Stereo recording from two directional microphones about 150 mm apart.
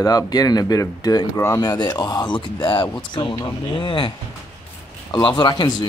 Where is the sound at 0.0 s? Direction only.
25° left (ahead or behind).